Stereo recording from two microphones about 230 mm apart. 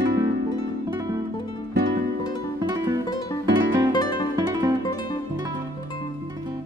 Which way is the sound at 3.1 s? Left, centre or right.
Centre.